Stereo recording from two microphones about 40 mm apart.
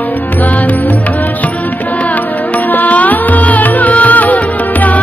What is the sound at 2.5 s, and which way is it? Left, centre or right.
Music, left.